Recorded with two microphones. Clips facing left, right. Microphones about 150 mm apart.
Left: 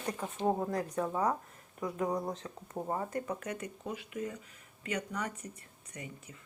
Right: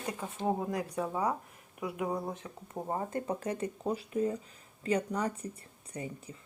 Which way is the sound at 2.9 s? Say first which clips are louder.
Right 4 dB; 30° right (ahead or behind).